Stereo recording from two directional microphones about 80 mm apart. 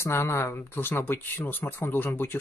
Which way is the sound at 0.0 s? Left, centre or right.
Left.